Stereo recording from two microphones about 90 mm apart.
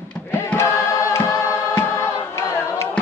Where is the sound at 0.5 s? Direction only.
30° left (ahead or behind).